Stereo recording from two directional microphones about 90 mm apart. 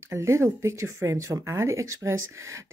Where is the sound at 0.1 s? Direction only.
30° right (ahead or behind).